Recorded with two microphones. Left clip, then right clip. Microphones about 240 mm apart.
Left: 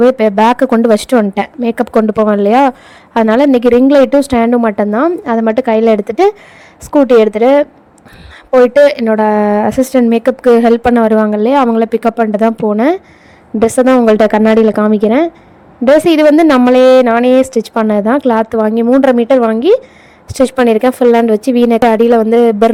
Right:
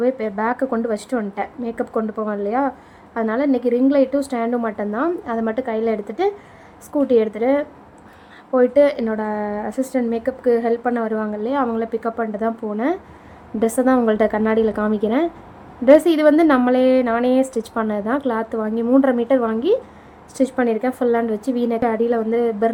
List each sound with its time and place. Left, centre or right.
0.0 s speech: left
8.8 s a woman's voice: left